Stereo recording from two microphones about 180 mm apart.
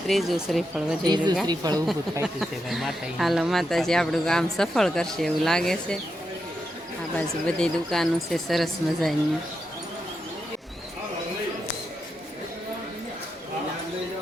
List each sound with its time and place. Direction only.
0.1 s speech: centre (ahead or behind)
1.0 s speech: 25° right (ahead or behind)
2.2 s speech: centre (ahead or behind)
7.2 s speech: 5° left (ahead or behind)